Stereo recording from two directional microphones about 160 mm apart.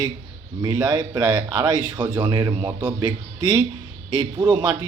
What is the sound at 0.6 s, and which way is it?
A man's voice, 25° right (ahead or behind).